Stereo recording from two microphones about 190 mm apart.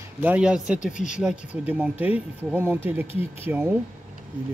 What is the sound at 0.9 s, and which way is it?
Speech, 40° left (ahead or behind).